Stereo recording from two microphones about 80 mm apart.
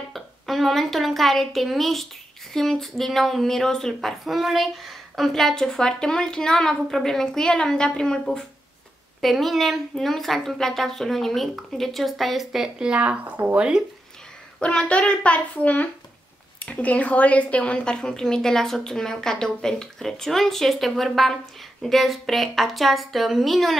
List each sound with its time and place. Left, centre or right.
0.1 s a woman's voice: centre
14.6 s a woman's voice: centre